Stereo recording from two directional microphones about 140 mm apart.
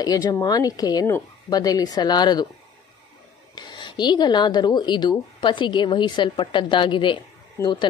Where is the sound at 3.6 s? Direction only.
35° left (ahead or behind).